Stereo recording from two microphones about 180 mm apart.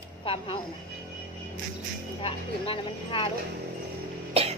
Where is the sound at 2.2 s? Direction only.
30° left (ahead or behind).